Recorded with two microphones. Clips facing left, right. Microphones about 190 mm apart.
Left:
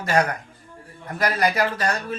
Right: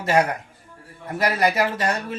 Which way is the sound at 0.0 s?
25° right (ahead or behind).